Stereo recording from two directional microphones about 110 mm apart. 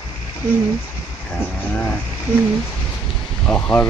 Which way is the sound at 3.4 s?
10° left (ahead or behind).